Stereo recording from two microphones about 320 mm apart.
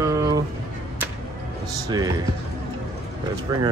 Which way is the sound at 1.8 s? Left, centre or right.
Centre.